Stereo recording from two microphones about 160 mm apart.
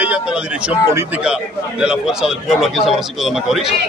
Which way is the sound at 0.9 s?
15° right (ahead or behind).